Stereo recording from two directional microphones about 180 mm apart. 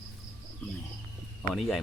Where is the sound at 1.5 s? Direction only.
Centre (ahead or behind).